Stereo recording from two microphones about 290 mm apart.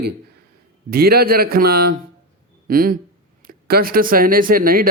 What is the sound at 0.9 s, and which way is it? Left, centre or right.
A man's voice, right.